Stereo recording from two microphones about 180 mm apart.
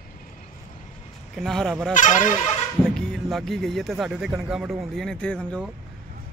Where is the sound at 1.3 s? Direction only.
Centre (ahead or behind).